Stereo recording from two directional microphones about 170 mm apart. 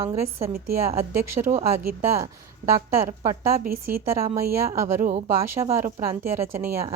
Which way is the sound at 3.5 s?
60° right (ahead or behind).